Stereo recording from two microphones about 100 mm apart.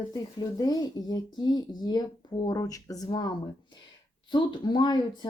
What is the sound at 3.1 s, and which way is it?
Speech, 45° left (ahead or behind).